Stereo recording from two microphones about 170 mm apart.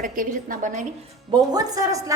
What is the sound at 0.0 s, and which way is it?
Speech, 55° right (ahead or behind).